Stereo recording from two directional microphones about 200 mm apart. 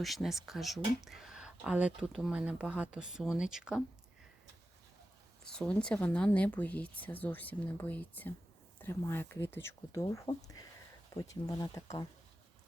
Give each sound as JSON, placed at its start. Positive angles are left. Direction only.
{"t": 0.0, "sound": "speech", "side_deg": 0}
{"t": 5.5, "sound": "speech", "side_deg": 5}